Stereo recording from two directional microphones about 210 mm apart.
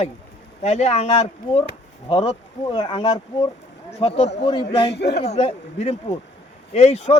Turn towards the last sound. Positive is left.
turn(degrees=30)  # may be behind; listen again after turning